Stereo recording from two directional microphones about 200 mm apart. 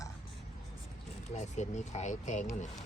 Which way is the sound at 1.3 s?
35° left (ahead or behind).